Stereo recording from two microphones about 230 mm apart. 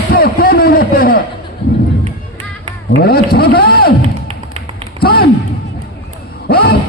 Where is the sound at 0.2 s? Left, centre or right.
Left.